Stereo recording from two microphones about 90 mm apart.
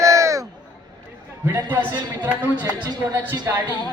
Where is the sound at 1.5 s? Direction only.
20° right (ahead or behind).